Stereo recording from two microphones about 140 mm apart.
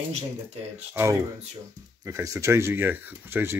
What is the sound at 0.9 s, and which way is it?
Speech, 20° right (ahead or behind).